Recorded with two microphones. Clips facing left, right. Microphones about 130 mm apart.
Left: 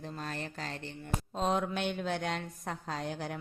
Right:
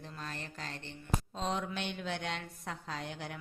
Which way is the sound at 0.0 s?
40° left (ahead or behind).